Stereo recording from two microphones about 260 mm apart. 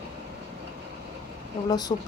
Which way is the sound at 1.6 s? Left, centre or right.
Centre.